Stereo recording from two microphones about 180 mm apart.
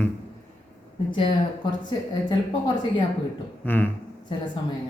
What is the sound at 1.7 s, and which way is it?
Speech, 25° left (ahead or behind).